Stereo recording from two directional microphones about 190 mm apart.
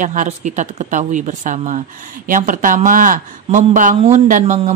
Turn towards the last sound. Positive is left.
turn(degrees=-40)  # may be behind; listen again after turning